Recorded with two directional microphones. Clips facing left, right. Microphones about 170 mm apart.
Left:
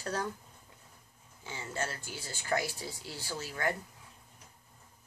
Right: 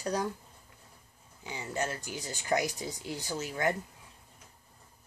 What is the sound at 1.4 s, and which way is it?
Speech, 15° right (ahead or behind).